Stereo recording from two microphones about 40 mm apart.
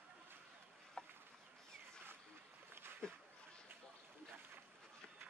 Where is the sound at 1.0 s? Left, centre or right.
Centre.